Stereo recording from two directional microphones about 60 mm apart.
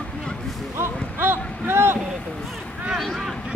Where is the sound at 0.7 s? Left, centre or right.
Right.